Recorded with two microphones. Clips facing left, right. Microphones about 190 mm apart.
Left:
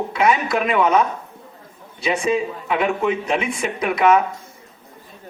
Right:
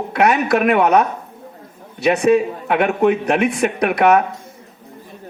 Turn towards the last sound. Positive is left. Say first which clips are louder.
# right 2 dB
turn(degrees=-65)  # may be behind; listen again after turning